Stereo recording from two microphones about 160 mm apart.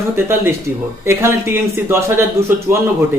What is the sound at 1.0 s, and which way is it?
A man's voice, 15° right (ahead or behind).